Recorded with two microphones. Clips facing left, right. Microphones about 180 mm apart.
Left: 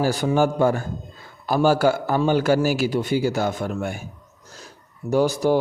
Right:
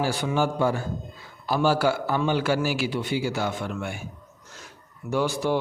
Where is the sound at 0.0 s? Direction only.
40° left (ahead or behind).